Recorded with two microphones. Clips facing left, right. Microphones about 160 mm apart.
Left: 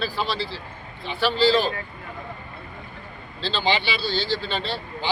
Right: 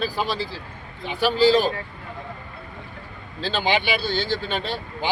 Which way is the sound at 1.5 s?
45° right (ahead or behind).